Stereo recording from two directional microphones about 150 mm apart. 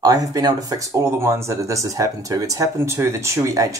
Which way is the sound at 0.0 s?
25° right (ahead or behind).